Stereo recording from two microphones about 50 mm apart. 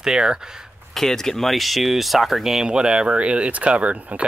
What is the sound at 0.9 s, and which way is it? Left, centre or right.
Speech, centre.